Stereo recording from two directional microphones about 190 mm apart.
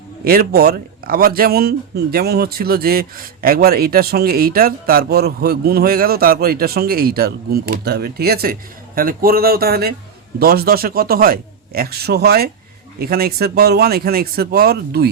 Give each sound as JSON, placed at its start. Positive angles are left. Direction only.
{"t": 0.3, "sound": "a man's voice", "side_deg": -50}